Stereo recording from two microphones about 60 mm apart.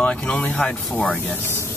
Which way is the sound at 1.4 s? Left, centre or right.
Left.